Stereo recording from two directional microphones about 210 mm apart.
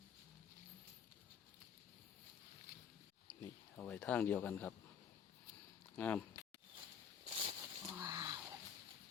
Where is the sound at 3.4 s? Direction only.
10° left (ahead or behind).